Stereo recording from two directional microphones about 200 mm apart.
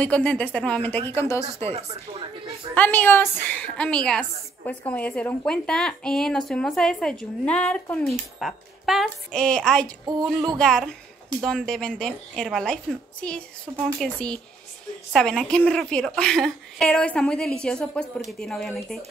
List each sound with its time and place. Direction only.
0.0 s speech: 5° left (ahead or behind)
1.7 s speech: 30° right (ahead or behind)
2.7 s a woman's voice: 10° left (ahead or behind)